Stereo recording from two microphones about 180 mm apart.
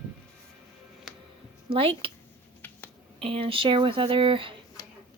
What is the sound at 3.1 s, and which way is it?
Speech, 30° right (ahead or behind).